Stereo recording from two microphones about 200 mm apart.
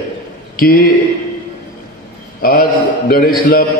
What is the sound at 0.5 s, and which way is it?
Speech, 45° left (ahead or behind).